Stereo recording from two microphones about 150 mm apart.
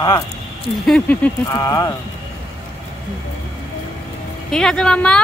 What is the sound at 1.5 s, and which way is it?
Speech, 25° left (ahead or behind).